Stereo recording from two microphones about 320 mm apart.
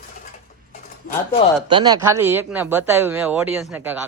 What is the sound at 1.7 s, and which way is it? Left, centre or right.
Speech, centre.